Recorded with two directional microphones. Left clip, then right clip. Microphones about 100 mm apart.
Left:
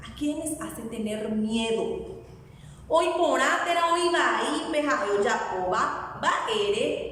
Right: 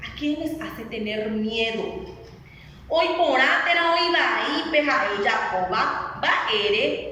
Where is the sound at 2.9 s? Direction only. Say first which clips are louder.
Right 2 dB; 40° left (ahead or behind).